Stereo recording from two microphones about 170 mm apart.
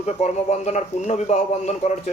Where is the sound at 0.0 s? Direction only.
40° left (ahead or behind).